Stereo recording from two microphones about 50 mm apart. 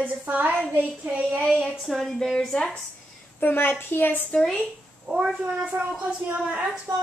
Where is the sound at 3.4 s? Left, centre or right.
Left.